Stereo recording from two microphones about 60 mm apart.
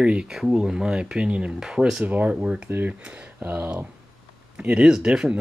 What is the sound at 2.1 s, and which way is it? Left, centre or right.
Speech, right.